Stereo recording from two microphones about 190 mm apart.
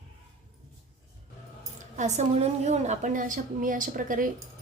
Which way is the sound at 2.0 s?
35° right (ahead or behind).